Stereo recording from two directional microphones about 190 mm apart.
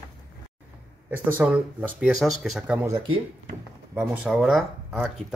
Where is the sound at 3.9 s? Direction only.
10° right (ahead or behind).